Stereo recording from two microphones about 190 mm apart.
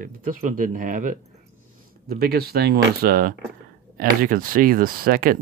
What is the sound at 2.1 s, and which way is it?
Speech, 55° right (ahead or behind).